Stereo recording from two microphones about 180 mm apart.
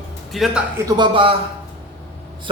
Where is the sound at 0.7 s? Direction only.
25° right (ahead or behind).